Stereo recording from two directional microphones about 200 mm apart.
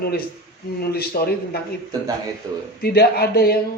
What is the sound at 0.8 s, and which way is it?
Speech, 50° left (ahead or behind).